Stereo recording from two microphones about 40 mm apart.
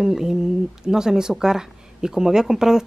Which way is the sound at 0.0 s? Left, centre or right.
Centre.